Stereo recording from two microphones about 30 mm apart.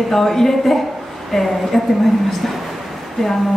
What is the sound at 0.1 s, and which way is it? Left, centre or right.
A woman's voice, centre.